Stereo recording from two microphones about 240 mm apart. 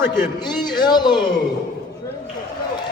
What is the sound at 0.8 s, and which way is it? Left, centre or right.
Speech, centre.